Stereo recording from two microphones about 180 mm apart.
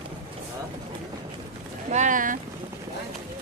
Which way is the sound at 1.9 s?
45° right (ahead or behind).